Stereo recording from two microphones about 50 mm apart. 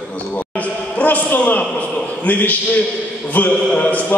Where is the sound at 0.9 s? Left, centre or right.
Left.